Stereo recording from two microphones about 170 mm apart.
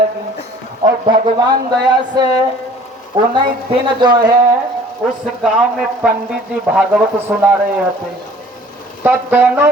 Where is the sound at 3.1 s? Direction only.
20° right (ahead or behind).